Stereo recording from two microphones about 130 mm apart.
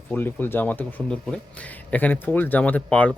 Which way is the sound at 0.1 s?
15° left (ahead or behind).